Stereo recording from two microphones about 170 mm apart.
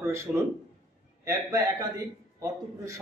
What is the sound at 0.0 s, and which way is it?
A man's voice, 15° right (ahead or behind).